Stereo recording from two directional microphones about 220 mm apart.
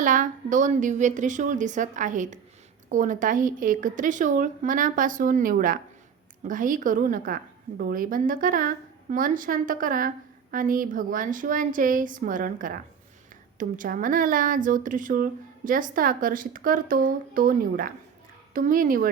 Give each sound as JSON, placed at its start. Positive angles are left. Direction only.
{"t": 0.0, "sound": "speech", "side_deg": -35}